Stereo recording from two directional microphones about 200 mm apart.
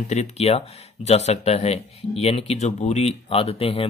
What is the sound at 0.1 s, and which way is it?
Speech, 35° left (ahead or behind).